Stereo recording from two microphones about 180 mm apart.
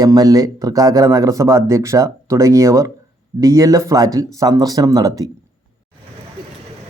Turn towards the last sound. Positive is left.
turn(degrees=-20)  # may be behind; listen again after turning